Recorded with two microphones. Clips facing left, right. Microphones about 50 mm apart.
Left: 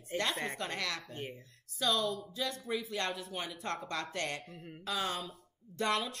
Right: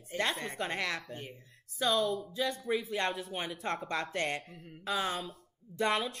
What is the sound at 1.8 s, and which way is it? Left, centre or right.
A woman's voice, right.